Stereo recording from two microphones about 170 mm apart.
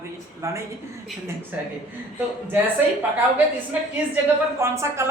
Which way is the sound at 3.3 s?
10° right (ahead or behind).